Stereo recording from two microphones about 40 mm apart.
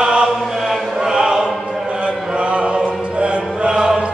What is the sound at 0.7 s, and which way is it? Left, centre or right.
Choir, centre.